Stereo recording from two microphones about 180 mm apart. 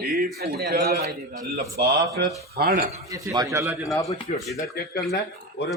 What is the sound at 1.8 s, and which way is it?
Speech, 70° right (ahead or behind).